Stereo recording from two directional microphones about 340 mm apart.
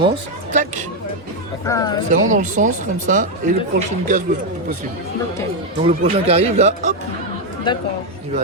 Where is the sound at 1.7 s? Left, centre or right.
Centre.